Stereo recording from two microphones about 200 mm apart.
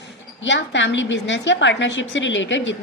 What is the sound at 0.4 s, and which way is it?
A woman's voice, 65° left (ahead or behind).